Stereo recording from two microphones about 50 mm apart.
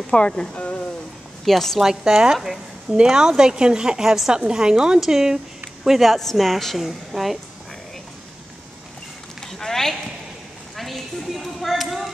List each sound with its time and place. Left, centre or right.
0.1 s speech: centre
1.4 s a woman's voice: centre
1.8 s a woman's voice: centre
9.4 s a sound: centre